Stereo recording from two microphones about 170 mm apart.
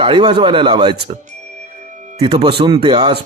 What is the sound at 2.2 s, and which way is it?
Speech, 30° right (ahead or behind).